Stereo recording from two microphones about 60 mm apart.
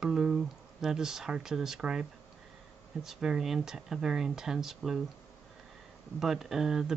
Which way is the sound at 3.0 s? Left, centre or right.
Centre.